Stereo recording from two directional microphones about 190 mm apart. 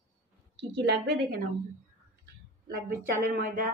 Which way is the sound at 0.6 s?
65° right (ahead or behind).